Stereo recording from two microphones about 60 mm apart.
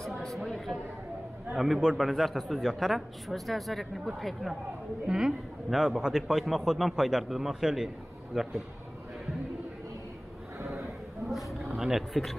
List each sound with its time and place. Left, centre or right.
0.2 s a sound: centre
1.5 s a man's voice: centre
11.7 s a man's voice: centre